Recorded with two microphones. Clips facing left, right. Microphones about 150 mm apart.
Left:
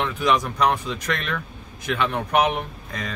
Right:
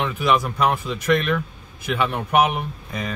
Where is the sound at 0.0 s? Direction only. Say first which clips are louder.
Right 1 dB; 5° right (ahead or behind).